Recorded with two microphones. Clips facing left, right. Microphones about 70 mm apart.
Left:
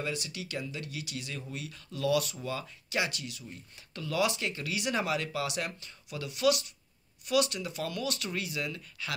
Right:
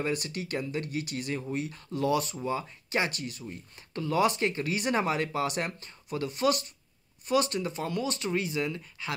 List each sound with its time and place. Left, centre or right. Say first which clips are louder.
0.0 s speech: right 5 dB; right